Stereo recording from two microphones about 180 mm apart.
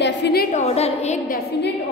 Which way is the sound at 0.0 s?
65° left (ahead or behind).